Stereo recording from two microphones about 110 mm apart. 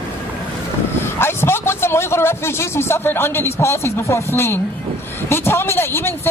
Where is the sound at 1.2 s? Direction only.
20° left (ahead or behind).